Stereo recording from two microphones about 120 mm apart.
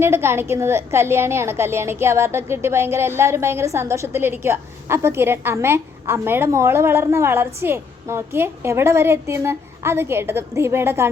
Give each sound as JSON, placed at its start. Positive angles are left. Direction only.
{"t": 0.0, "sound": "a woman's voice", "side_deg": -20}